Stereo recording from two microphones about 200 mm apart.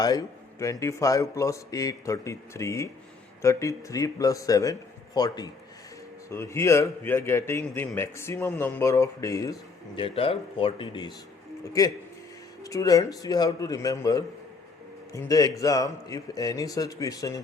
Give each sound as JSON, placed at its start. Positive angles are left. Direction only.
{"t": 0.0, "sound": "a man's voice", "side_deg": 20}